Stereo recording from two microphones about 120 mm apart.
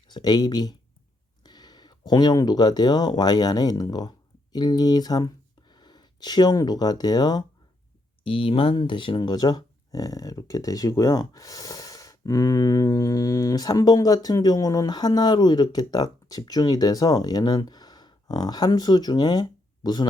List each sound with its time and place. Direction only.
0.1 s speech: 35° left (ahead or behind)
8.2 s speech: 50° left (ahead or behind)